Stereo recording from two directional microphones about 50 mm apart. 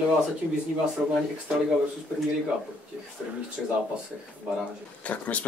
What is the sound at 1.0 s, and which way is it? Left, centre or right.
Speech, right.